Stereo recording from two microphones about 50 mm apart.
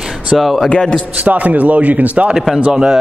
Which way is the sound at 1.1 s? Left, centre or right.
Right.